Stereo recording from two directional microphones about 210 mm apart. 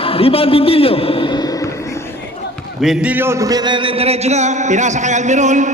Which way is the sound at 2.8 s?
5° right (ahead or behind).